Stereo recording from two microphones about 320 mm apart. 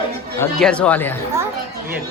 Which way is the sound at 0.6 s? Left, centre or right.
Centre.